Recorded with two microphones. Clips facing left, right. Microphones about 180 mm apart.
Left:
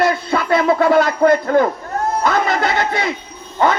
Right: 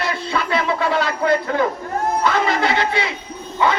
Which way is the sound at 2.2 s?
45° left (ahead or behind).